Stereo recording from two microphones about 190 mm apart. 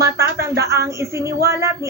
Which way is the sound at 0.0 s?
15° right (ahead or behind).